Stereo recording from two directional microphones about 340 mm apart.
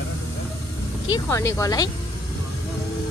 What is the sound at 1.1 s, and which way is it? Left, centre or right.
Speech, centre.